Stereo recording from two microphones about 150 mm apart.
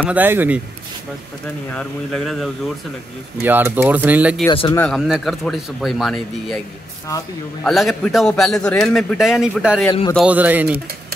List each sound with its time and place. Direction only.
0.0 s speech: 10° right (ahead or behind)
1.7 s speech: 5° left (ahead or behind)
3.4 s speech: 15° right (ahead or behind)
4.5 s speech: 35° left (ahead or behind)
4.7 s a man's voice: 5° left (ahead or behind)
7.6 s a man's voice: centre (ahead or behind)